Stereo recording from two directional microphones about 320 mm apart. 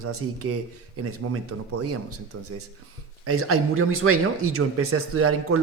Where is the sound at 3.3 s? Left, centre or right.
Right.